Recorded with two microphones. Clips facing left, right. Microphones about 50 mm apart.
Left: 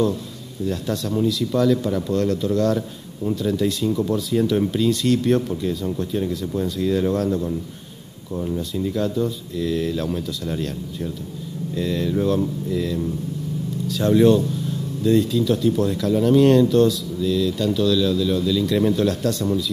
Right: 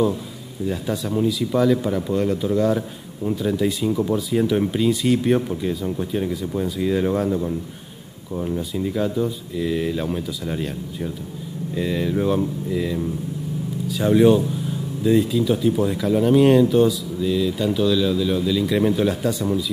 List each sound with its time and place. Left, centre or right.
0.7 s speech: centre